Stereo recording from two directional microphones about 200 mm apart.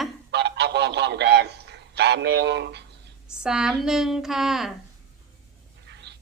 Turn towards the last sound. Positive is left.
turn(degrees=-60)  # may be behind; listen again after turning